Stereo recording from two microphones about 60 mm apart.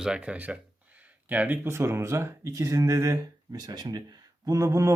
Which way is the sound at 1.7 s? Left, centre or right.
Right.